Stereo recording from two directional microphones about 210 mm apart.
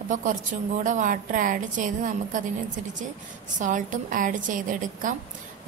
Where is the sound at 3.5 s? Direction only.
40° right (ahead or behind).